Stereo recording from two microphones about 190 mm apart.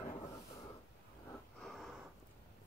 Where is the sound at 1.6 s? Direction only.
Centre (ahead or behind).